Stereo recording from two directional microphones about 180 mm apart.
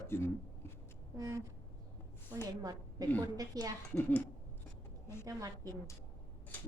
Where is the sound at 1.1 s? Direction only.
20° right (ahead or behind).